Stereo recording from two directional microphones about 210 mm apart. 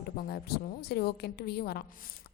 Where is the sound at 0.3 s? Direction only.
50° left (ahead or behind).